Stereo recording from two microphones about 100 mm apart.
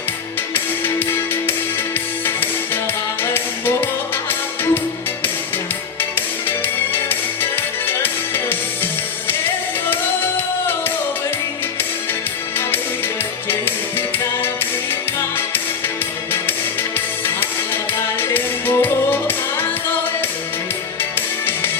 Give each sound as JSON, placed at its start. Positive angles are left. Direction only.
{"t": 3.3, "sound": "music", "side_deg": 20}
{"t": 6.9, "sound": "music", "side_deg": 20}
{"t": 13.5, "sound": "music", "side_deg": 20}
{"t": 18.2, "sound": "music", "side_deg": 20}
{"t": 21.0, "sound": "music", "side_deg": 20}